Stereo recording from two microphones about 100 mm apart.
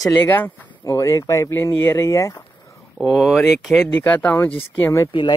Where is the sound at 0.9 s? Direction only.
30° left (ahead or behind).